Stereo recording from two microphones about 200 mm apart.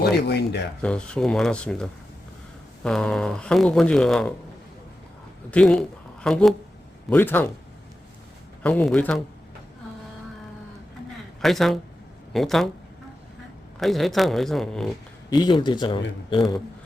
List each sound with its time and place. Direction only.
0.0 s speech: 55° left (ahead or behind)
0.8 s speech: 5° left (ahead or behind)
5.5 s speech: 5° left (ahead or behind)
8.6 s speech: 5° left (ahead or behind)
11.4 s speech: centre (ahead or behind)
13.7 s speech: centre (ahead or behind)
15.3 s speech: 20° left (ahead or behind)